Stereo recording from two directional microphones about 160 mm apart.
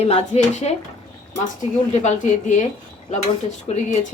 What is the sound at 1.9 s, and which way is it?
Speech, 45° left (ahead or behind).